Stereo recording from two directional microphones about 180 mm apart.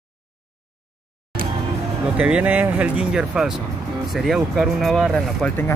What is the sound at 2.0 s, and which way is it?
Speech, 5° right (ahead or behind).